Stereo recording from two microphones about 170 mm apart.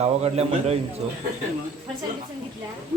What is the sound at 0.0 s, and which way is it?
Speech, 35° right (ahead or behind).